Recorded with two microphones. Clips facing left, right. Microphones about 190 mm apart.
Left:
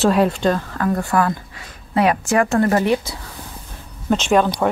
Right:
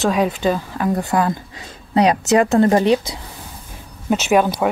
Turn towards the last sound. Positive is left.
turn(degrees=-10)  # may be behind; listen again after turning